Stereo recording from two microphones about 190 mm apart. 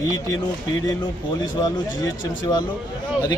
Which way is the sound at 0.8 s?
20° left (ahead or behind).